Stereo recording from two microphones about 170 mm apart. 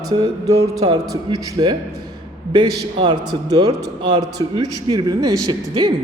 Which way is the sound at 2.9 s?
25° right (ahead or behind).